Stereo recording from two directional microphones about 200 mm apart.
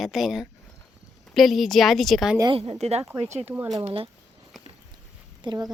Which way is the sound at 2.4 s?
30° right (ahead or behind).